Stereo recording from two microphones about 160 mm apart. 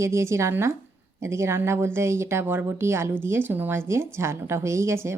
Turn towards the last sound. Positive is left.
turn(degrees=-15)  # may be behind; listen again after turning